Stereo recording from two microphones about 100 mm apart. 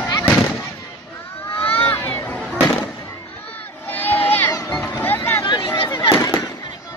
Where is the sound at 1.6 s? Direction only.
20° left (ahead or behind).